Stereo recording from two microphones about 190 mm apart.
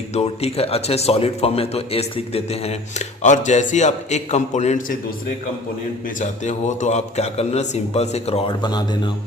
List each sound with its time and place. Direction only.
0.1 s speech: 35° left (ahead or behind)
6.1 s speech: 40° left (ahead or behind); by 9.0 s 20° left (ahead or behind)